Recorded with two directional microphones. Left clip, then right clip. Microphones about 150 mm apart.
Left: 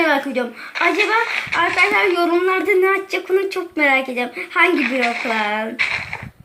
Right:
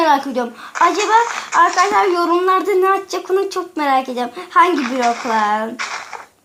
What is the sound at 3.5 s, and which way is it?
A child's voice, 5° right (ahead or behind).